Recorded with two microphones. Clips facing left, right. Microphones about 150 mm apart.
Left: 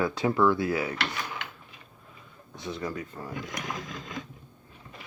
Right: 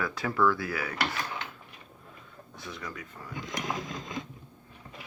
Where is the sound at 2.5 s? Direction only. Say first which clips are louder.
Left 7 dB; 25° left (ahead or behind).